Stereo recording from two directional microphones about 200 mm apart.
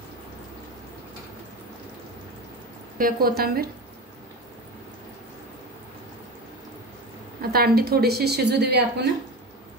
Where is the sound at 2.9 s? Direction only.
45° right (ahead or behind).